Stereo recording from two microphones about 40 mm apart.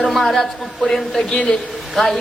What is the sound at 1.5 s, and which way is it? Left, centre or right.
Speech, centre.